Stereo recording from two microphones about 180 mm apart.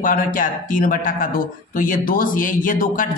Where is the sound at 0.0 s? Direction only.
50° left (ahead or behind).